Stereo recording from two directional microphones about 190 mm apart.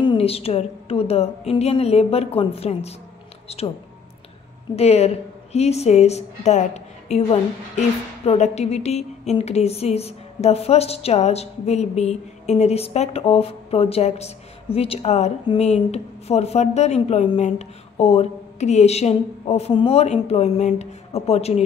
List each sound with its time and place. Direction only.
0.0 s a woman's voice: 30° left (ahead or behind)
4.7 s a woman's voice: 35° left (ahead or behind)